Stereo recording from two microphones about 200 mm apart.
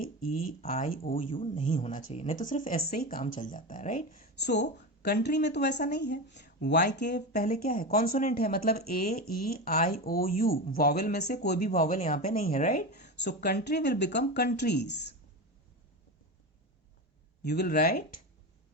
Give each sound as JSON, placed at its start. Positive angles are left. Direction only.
{"t": 0.0, "sound": "speech", "side_deg": 45}
{"t": 7.3, "sound": "speech", "side_deg": 45}
{"t": 17.4, "sound": "speech", "side_deg": 55}